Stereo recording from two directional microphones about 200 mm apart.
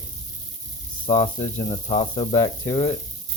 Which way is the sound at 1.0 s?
25° left (ahead or behind).